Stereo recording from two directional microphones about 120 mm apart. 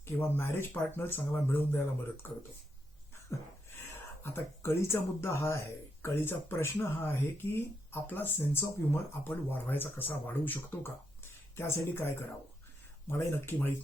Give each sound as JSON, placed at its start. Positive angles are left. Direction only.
{"t": 0.0, "sound": "speech", "side_deg": 15}
{"t": 4.2, "sound": "speech", "side_deg": 20}